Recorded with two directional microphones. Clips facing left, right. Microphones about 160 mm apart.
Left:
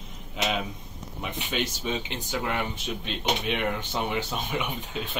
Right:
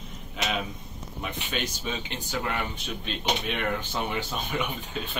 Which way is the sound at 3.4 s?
15° left (ahead or behind).